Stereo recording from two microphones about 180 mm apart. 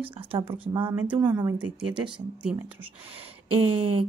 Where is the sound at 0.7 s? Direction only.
10° right (ahead or behind).